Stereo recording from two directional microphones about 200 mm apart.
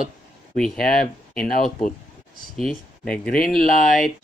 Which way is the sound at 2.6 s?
5° left (ahead or behind).